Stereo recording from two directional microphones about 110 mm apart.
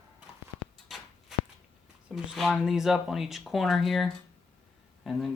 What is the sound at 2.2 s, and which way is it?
Speech, centre (ahead or behind).